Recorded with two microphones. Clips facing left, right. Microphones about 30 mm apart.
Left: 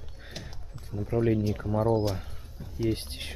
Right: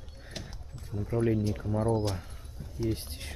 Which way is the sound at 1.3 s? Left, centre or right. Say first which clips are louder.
Left 3 dB; centre.